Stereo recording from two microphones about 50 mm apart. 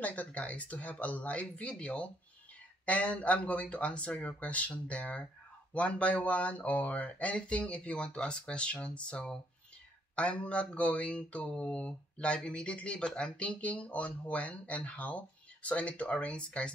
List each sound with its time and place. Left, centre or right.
0.0 s speech: left